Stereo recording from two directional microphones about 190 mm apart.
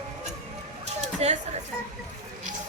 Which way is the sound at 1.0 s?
35° right (ahead or behind).